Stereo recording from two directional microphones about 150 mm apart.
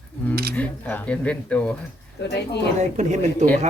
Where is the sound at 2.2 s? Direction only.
90° left.